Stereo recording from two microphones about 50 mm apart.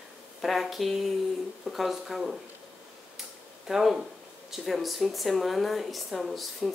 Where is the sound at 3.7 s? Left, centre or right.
Centre.